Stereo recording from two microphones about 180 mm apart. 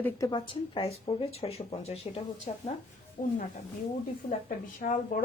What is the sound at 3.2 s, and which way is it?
Speech, 50° left (ahead or behind).